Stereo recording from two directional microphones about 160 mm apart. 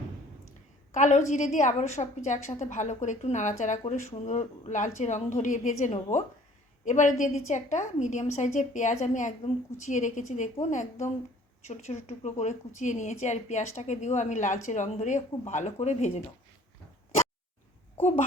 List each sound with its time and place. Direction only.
0.9 s a woman's voice: 50° left (ahead or behind)